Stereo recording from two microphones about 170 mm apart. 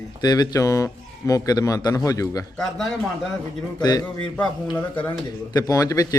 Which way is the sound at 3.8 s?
25° left (ahead or behind).